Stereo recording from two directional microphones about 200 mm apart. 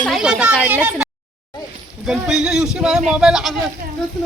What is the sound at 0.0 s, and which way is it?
Speech, centre (ahead or behind).